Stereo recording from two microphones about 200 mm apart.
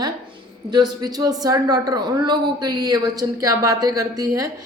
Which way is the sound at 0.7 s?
20° right (ahead or behind).